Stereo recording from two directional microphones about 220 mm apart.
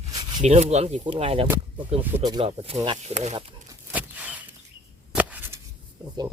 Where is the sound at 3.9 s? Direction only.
5° right (ahead or behind).